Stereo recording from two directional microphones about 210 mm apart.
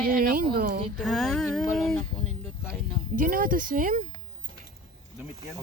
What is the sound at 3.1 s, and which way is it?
Speech, 45° right (ahead or behind).